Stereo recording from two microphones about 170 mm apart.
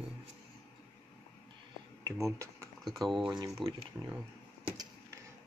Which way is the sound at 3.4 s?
20° right (ahead or behind).